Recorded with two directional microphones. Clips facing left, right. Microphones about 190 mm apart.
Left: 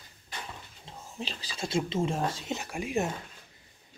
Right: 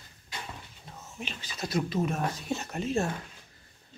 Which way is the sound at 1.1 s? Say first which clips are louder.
Left 2 dB; 35° left (ahead or behind).